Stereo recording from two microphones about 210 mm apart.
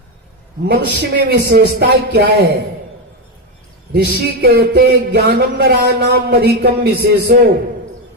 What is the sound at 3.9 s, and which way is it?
Speech, 50° right (ahead or behind).